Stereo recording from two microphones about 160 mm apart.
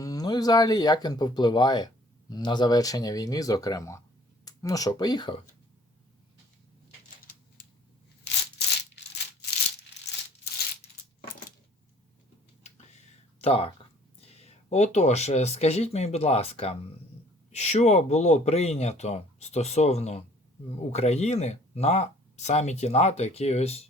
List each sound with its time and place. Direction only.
0.0 s speech: 25° left (ahead or behind)
13.4 s speech: 35° left (ahead or behind)